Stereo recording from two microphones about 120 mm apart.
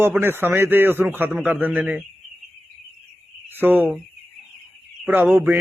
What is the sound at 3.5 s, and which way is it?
Speech, 15° right (ahead or behind).